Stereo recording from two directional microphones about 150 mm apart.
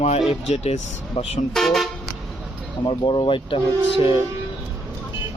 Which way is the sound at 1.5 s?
Centre (ahead or behind).